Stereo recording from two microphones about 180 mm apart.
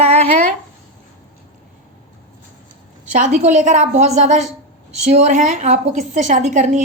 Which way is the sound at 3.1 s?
40° right (ahead or behind).